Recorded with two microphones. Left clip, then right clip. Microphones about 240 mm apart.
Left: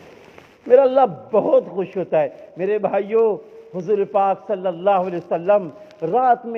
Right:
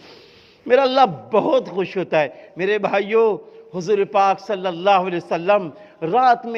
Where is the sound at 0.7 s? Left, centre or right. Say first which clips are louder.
Left 1 dB; right.